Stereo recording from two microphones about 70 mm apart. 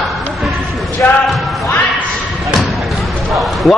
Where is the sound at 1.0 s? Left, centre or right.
Centre.